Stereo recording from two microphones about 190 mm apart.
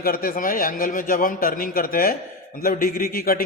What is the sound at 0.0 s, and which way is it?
A man's voice, 50° left (ahead or behind).